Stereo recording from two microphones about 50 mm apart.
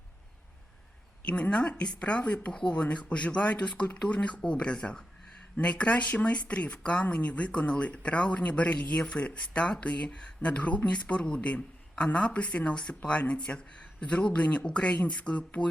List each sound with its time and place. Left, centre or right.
1.2 s a man's voice: left